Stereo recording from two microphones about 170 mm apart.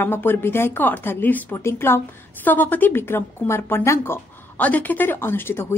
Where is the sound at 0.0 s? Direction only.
10° left (ahead or behind).